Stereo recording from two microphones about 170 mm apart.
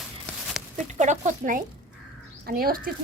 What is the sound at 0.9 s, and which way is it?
Speech, 45° right (ahead or behind).